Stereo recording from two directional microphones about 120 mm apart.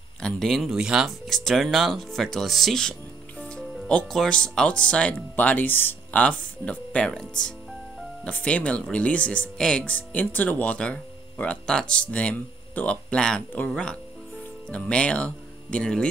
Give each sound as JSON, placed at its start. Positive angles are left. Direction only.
{"t": 0.2, "sound": "speech", "side_deg": 0}